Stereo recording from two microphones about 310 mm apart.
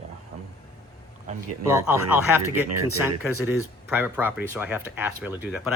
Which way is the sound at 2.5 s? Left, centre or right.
Centre.